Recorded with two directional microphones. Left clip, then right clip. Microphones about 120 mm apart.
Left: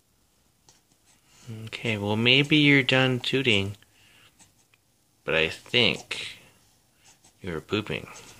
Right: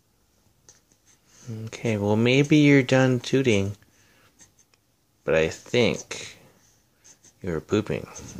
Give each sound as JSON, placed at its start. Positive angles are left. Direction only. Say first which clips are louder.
{"t": 1.6, "sound": "speech", "louder": "right 2 dB", "side_deg": -50}
{"t": 3.7, "sound": "writing", "louder": "even", "side_deg": -45}
{"t": 5.2, "sound": "speech", "louder": "right 3 dB", "side_deg": -50}